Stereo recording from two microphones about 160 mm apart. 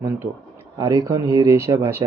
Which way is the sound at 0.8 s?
20° right (ahead or behind).